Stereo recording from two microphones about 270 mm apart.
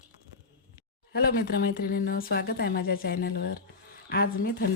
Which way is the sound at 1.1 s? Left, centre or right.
Left.